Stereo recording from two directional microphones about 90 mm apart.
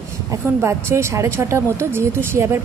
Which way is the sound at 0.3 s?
30° right (ahead or behind).